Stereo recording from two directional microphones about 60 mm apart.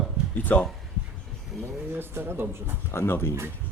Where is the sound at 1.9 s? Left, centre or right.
Right.